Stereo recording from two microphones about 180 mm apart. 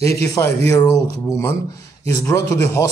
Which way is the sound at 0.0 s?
15° left (ahead or behind).